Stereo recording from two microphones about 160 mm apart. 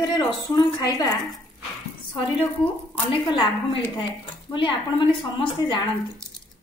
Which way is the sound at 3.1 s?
30° left (ahead or behind).